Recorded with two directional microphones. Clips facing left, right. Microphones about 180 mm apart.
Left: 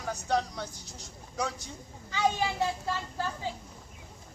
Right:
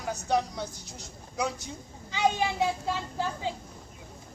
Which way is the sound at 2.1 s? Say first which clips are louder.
Right 2 dB; 15° right (ahead or behind).